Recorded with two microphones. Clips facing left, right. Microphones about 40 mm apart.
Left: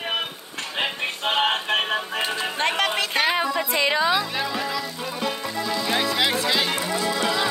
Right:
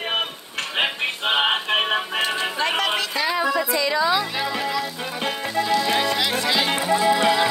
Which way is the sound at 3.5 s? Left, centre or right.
Left.